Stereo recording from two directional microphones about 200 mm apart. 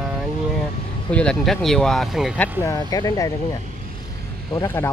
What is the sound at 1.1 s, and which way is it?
Speech, 5° left (ahead or behind).